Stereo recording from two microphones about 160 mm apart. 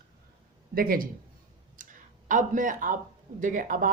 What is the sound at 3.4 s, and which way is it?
Speech, 55° right (ahead or behind).